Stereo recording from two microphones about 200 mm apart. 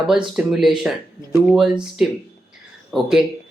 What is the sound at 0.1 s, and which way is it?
Speech, centre (ahead or behind).